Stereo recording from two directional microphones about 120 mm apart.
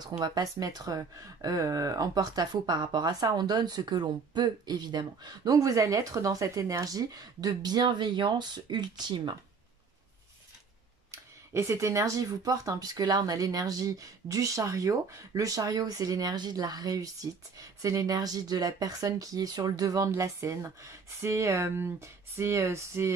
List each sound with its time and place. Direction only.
0.2 s speech: 35° right (ahead or behind)
11.1 s speech: 25° right (ahead or behind)